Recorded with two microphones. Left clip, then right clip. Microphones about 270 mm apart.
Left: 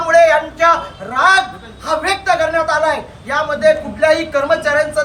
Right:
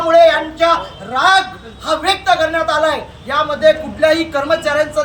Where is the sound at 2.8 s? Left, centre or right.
Centre.